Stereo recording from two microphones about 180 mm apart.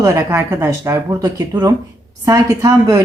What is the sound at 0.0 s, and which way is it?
A woman's voice, 15° right (ahead or behind).